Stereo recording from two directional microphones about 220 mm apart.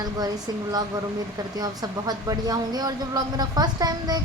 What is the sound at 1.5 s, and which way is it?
A woman's voice, 15° right (ahead or behind).